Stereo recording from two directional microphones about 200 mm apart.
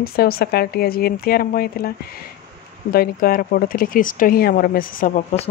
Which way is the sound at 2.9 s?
50° left (ahead or behind).